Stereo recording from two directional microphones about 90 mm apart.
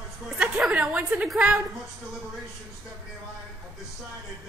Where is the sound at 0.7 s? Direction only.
15° right (ahead or behind).